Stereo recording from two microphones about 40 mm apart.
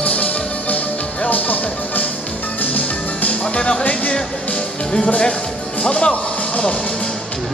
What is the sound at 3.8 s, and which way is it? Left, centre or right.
Speech, left.